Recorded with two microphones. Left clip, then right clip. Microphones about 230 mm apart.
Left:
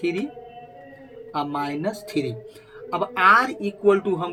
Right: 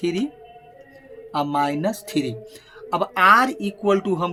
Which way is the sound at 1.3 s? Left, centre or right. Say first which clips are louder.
Right 5 dB; right.